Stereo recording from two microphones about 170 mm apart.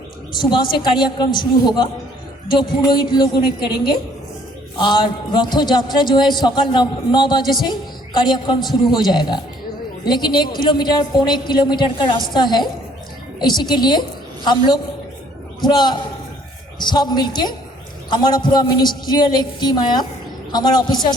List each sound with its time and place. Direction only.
0.3 s a man's voice: 30° left (ahead or behind)
4.8 s a man's voice: 25° left (ahead or behind)
15.6 s a man's voice: 25° left (ahead or behind)